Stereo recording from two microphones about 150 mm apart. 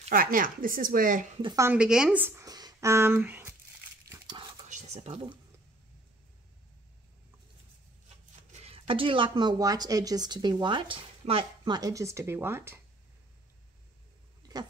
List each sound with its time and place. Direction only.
0.1 s speech: 70° right (ahead or behind)
1.6 s speech: 10° right (ahead or behind)
4.6 s a sound: 50° right (ahead or behind)
8.5 s speech: 45° right (ahead or behind); by 12.8 s 15° right (ahead or behind)